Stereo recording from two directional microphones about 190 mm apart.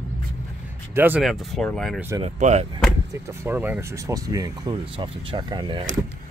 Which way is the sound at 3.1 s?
10° right (ahead or behind).